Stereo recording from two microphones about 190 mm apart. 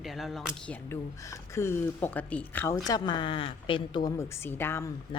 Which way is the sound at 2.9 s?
20° left (ahead or behind).